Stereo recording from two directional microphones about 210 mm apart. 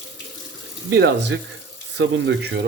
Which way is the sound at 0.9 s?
55° right (ahead or behind).